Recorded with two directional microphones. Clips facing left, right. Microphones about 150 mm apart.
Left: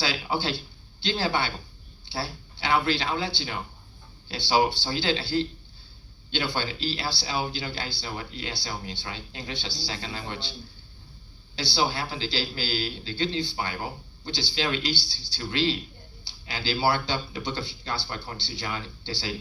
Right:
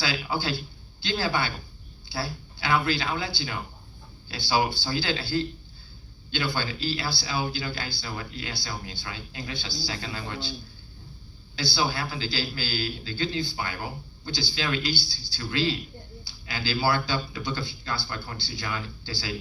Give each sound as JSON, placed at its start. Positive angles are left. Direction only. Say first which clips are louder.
{"t": 0.0, "sound": "speech", "louder": "left 1 dB", "side_deg": 25}
{"t": 11.5, "sound": "speech", "louder": "left 1 dB", "side_deg": 30}